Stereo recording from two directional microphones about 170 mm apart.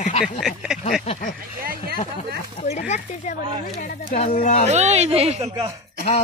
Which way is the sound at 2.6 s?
40° left (ahead or behind).